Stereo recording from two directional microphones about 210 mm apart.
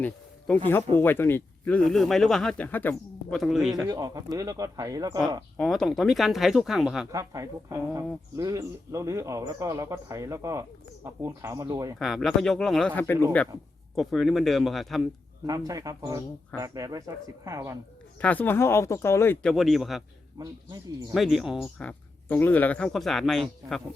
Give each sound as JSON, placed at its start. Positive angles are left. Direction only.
{"t": 0.0, "sound": "a man's voice", "side_deg": 5}
{"t": 3.8, "sound": "speech", "side_deg": -15}
{"t": 5.5, "sound": "speech", "side_deg": 0}
{"t": 7.1, "sound": "speech", "side_deg": -15}
{"t": 11.9, "sound": "speech", "side_deg": 0}
{"t": 15.4, "sound": "speech", "side_deg": -15}
{"t": 18.2, "sound": "speech", "side_deg": 5}
{"t": 21.1, "sound": "speech", "side_deg": 0}